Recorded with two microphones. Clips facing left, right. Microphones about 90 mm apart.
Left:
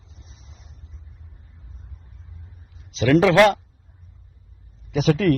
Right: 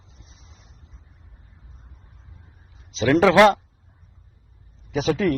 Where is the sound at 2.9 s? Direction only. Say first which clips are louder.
Even; 25° right (ahead or behind).